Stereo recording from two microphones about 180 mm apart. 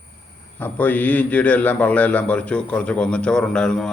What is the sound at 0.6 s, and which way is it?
A man's voice, 10° left (ahead or behind).